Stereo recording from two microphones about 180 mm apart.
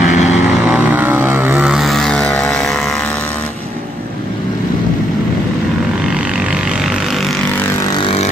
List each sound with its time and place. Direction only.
0.0 s vehicle: 40° left (ahead or behind)
0.3 s vehicle: 5° right (ahead or behind)
6.0 s vehicle: centre (ahead or behind)
7.9 s vehicle: 30° left (ahead or behind)